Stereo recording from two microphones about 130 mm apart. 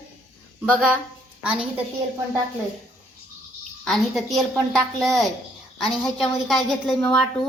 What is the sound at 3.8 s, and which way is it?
A woman's voice, 5° left (ahead or behind).